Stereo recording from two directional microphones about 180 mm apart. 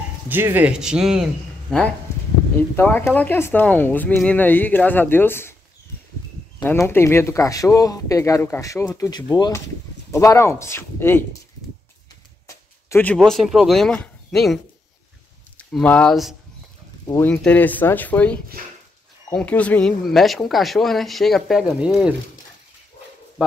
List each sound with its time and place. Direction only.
0.3 s speech: 10° right (ahead or behind)
2.7 s speech: 10° left (ahead or behind)
6.6 s speech: 10° left (ahead or behind)
12.4 s speech: 10° left (ahead or behind)
15.7 s speech: 5° left (ahead or behind)
17.0 s speech: 15° left (ahead or behind); by 22.1 s 5° right (ahead or behind)